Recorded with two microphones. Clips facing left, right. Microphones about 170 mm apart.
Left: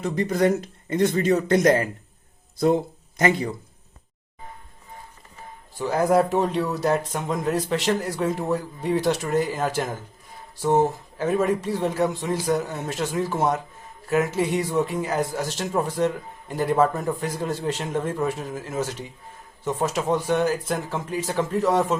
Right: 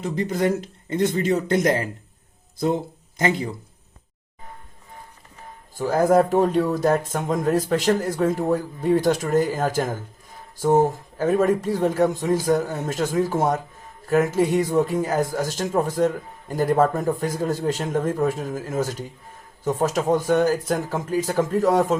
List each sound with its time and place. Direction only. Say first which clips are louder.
0.9 s speech: left 1 dB; 25° right (ahead or behind)
3.2 s speech: left 1 dB; 25° right (ahead or behind)
5.7 s speech: right 2 dB; 45° right (ahead or behind)